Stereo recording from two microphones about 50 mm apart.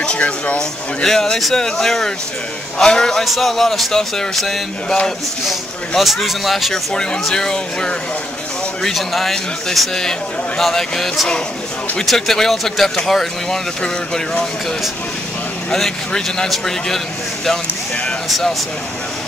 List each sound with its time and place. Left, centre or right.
0.0 s speech: left
1.0 s speech: centre
5.5 s speech: centre
6.7 s speech: centre
8.8 s speech: centre
12.1 s speech: centre
15.7 s speech: centre